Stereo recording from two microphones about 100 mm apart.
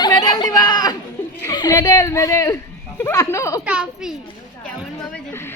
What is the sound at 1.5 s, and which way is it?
A woman's voice, 40° left (ahead or behind).